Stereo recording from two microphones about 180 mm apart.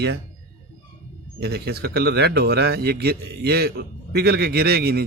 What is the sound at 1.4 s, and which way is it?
A man's voice, 65° right (ahead or behind).